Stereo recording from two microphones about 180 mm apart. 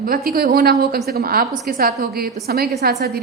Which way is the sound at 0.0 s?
55° right (ahead or behind).